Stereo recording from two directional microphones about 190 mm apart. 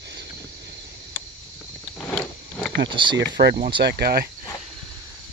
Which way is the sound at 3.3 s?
65° right (ahead or behind).